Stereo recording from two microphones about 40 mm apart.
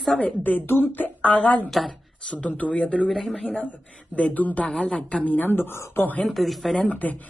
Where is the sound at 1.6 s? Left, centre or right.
Centre.